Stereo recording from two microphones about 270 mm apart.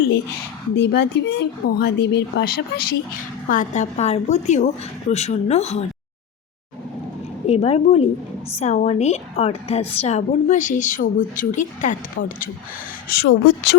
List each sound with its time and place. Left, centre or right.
0.8 s a woman's voice: left
7.4 s a woman's voice: left